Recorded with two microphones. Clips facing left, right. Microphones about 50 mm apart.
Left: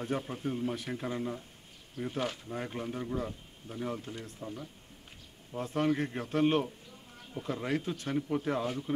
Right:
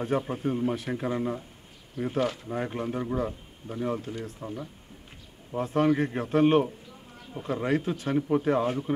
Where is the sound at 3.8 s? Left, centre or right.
Centre.